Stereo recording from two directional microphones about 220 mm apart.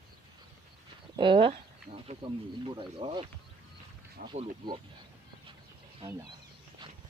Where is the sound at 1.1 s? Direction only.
20° right (ahead or behind).